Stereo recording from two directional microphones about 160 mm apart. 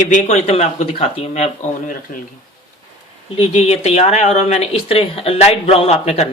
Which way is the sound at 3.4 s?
40° left (ahead or behind).